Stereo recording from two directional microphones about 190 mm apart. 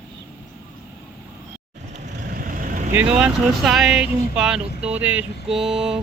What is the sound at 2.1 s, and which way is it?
Vehicle, 45° right (ahead or behind).